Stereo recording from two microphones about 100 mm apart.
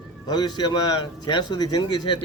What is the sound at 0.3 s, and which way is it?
A man's voice, 45° left (ahead or behind).